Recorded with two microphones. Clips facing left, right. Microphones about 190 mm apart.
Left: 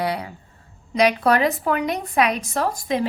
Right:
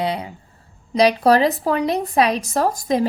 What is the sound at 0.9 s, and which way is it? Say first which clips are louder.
A woman's voice: right 3 dB; 35° right (ahead or behind).